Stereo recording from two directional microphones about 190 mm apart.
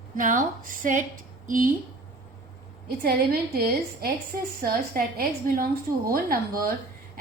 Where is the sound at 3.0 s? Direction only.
55° right (ahead or behind).